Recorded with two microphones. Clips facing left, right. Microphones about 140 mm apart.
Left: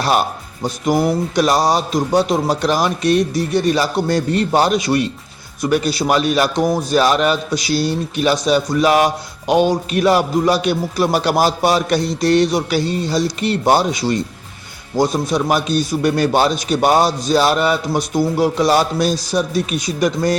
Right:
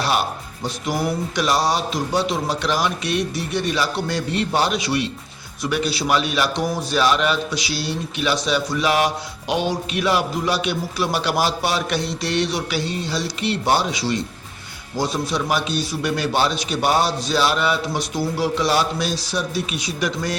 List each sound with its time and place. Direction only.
0.6 s a man's voice: 45° left (ahead or behind)